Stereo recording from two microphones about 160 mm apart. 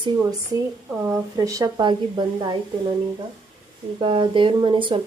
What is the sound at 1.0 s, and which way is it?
Speech, 20° right (ahead or behind).